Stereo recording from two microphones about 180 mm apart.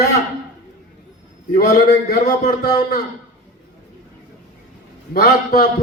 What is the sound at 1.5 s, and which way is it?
Speech, 50° left (ahead or behind).